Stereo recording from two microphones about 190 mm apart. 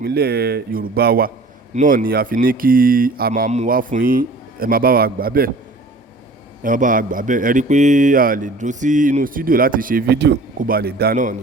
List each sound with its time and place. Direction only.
0.0 s a man's voice: 55° right (ahead or behind)
6.6 s a man's voice: 45° right (ahead or behind)